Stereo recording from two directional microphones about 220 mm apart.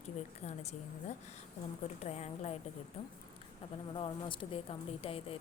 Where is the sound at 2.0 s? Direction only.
30° left (ahead or behind).